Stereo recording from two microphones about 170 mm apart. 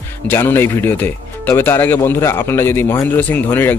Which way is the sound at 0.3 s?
15° left (ahead or behind).